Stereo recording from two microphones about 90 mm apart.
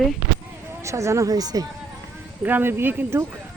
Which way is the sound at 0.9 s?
35° right (ahead or behind).